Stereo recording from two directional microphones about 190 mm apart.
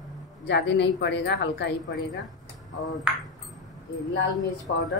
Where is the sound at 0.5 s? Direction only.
65° left (ahead or behind).